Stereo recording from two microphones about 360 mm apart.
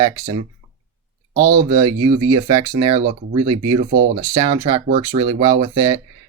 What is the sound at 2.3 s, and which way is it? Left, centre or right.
Speech, centre.